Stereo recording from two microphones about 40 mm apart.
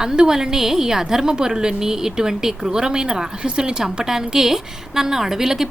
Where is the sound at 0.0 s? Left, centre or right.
Centre.